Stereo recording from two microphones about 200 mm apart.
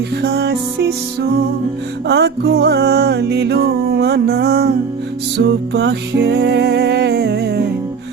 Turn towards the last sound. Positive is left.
turn(degrees=-55)  # may be behind; listen again after turning